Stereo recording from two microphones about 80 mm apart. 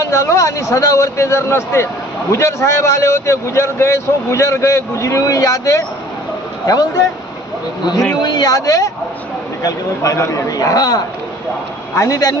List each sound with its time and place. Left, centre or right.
0.0 s a man's voice: left
8.1 s a man's voice: left